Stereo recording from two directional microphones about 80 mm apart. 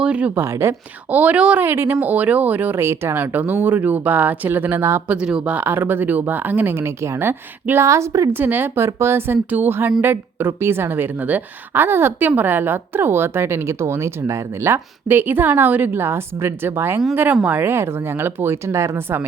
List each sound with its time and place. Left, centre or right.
0.0 s speech: centre
0.3 s speech: right
1.1 s a woman's voice: centre
1.6 s a woman's voice: right
5.0 s a woman's voice: centre; by 8.3 s right
8.3 s a woman's voice: right
15.0 s a woman's voice: right